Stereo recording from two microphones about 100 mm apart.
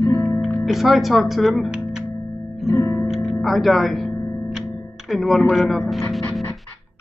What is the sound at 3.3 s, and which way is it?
Music, centre (ahead or behind).